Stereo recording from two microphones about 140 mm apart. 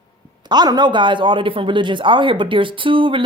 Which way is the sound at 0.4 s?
30° right (ahead or behind).